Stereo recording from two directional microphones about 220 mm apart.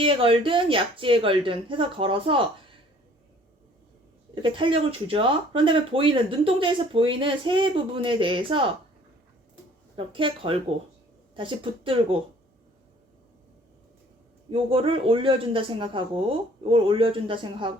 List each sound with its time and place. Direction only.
0.0 s speech: 25° right (ahead or behind)
4.4 s speech: 20° right (ahead or behind)
9.9 s speech: 25° right (ahead or behind)
14.5 s speech: 25° right (ahead or behind)